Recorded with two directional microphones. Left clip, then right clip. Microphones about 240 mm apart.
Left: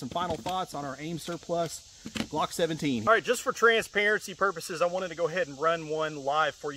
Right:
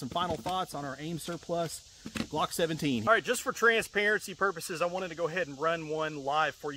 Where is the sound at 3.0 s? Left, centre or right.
Centre.